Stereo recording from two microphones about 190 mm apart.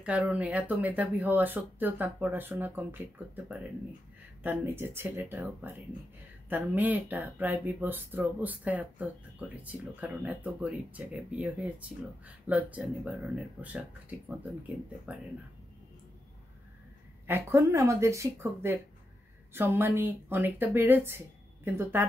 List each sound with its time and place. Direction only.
0.0 s speech: 5° right (ahead or behind)
4.4 s speech: 10° right (ahead or behind)
17.3 s speech: 15° right (ahead or behind)